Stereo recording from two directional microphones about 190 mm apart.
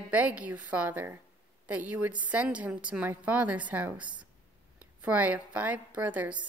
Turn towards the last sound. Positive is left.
turn(degrees=-10)  # may be behind; listen again after turning